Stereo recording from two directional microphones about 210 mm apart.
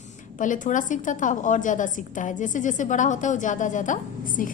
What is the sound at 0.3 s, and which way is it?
A woman's voice, 40° left (ahead or behind).